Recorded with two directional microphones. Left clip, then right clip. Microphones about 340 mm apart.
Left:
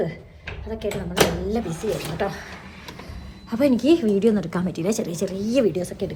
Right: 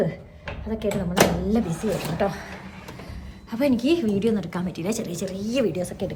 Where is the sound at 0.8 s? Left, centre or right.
Centre.